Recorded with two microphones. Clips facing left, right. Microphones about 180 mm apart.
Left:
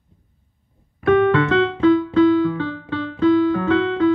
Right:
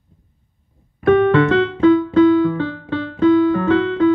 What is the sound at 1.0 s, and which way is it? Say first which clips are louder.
Keyboard: right 3 dB; 50° right (ahead or behind).